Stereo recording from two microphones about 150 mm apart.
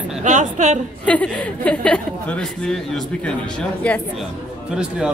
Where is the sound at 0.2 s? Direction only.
55° right (ahead or behind).